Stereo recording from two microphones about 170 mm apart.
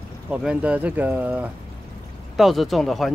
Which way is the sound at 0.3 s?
5° right (ahead or behind).